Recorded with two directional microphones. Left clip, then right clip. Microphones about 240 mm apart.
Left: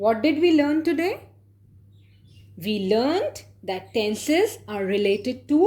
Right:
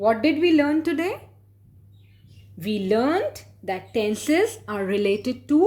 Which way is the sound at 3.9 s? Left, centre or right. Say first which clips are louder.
Even; centre.